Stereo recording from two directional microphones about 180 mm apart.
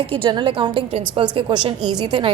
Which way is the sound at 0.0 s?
30° right (ahead or behind).